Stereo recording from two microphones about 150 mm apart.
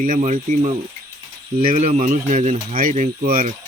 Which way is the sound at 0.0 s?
55° right (ahead or behind).